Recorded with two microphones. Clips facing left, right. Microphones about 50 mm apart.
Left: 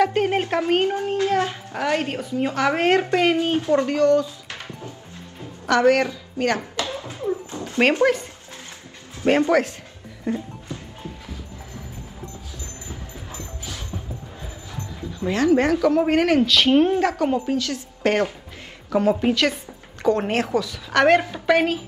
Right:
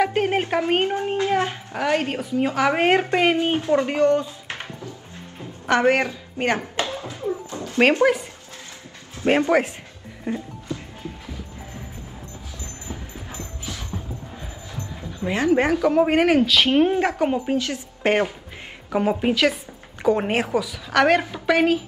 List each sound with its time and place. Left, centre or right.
0.0 s a woman's voice: centre
0.6 s speech: right
1.7 s a woman's voice: centre; by 4.6 s right
5.7 s speech: right
7.8 s speech: centre
9.2 s speech: right
12.8 s a sound: right
15.1 s a woman's voice: centre